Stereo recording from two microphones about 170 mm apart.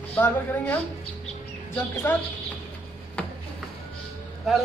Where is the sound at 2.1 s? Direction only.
15° left (ahead or behind).